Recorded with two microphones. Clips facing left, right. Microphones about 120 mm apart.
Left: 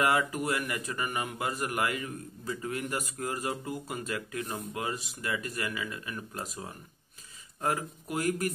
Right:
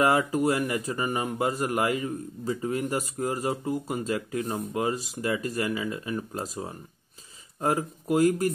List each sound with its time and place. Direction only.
0.0 s speech: 30° right (ahead or behind)